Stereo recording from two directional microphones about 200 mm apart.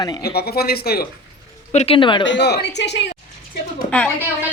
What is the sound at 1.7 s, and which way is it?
Speech, 30° left (ahead or behind).